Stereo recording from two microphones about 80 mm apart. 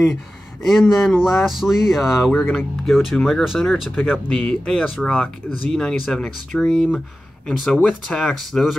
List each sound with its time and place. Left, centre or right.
0.7 s speech: centre
4.0 s speech: centre